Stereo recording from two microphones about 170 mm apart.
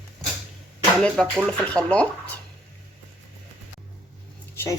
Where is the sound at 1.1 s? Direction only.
5° right (ahead or behind).